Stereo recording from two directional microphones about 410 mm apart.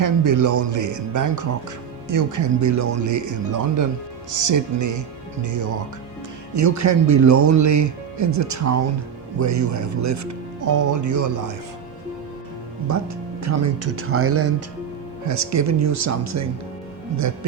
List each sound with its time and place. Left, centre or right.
0.0 s speech: right
12.9 s speech: right